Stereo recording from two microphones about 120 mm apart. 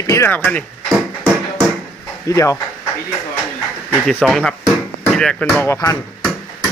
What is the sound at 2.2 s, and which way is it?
Speech, 25° left (ahead or behind).